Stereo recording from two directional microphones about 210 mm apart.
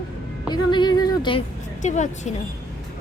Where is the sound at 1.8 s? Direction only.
35° left (ahead or behind).